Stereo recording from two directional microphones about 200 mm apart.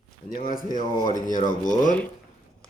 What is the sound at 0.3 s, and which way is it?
Speech, 45° left (ahead or behind).